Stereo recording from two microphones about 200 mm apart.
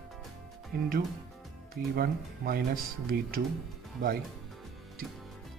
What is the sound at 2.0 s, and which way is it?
Speech, 50° right (ahead or behind).